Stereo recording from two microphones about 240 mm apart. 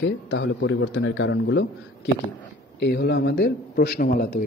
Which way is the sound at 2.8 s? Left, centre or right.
Left.